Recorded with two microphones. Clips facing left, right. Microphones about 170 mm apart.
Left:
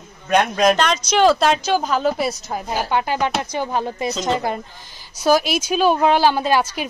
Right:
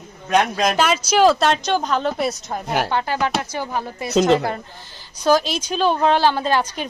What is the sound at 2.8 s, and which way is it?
A woman's voice, 15° left (ahead or behind).